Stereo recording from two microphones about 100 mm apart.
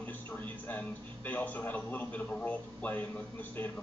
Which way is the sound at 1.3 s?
15° left (ahead or behind).